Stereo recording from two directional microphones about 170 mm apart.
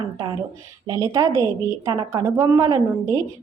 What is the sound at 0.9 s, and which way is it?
A woman's voice, 20° right (ahead or behind).